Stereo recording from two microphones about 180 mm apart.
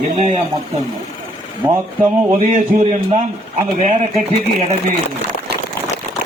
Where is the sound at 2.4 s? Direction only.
40° right (ahead or behind).